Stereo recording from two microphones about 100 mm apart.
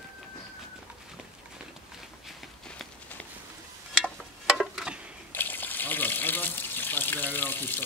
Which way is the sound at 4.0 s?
5° right (ahead or behind).